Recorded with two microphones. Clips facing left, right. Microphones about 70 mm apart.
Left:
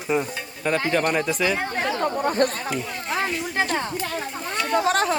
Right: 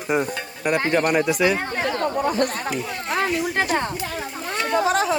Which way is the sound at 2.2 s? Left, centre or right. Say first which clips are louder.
Left 2 dB; left.